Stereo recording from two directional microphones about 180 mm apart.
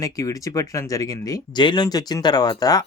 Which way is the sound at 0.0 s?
20° left (ahead or behind).